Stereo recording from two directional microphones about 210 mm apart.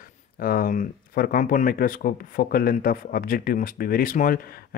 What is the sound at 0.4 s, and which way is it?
Speech, 45° left (ahead or behind).